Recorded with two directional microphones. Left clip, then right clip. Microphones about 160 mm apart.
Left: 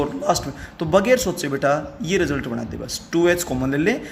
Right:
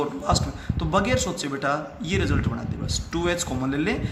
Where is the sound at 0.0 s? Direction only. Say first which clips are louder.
Left 4 dB; 50° left (ahead or behind).